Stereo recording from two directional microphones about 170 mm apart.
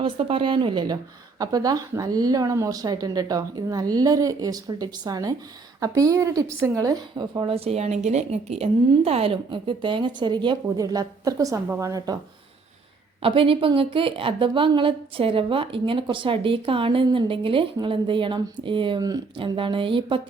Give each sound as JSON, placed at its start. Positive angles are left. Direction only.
{"t": 0.0, "sound": "a woman's voice", "side_deg": -30}
{"t": 13.2, "sound": "a woman's voice", "side_deg": -30}